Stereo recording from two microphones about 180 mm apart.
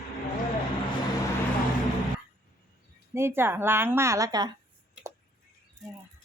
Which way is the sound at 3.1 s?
15° right (ahead or behind).